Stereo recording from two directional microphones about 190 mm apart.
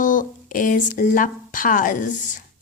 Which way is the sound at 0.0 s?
45° left (ahead or behind).